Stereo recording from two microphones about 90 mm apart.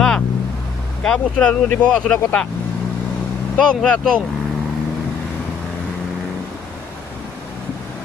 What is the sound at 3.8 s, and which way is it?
Speech, 10° left (ahead or behind).